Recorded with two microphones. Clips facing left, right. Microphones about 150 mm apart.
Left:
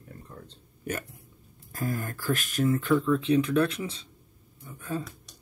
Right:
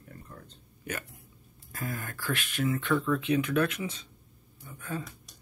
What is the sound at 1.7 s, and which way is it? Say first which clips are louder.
Speech: left 5 dB; 40° left (ahead or behind).